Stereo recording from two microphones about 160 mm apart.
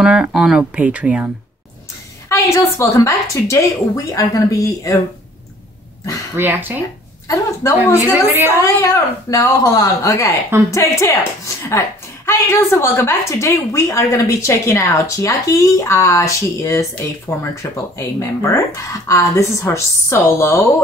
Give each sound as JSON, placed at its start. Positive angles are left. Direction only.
{"t": 0.0, "sound": "speech", "side_deg": -5}
{"t": 2.2, "sound": "a woman's voice", "side_deg": 20}
{"t": 6.3, "sound": "speech", "side_deg": -10}
{"t": 7.2, "sound": "speech", "side_deg": 15}
{"t": 8.3, "sound": "speech", "side_deg": -15}
{"t": 8.5, "sound": "a woman's voice", "side_deg": 20}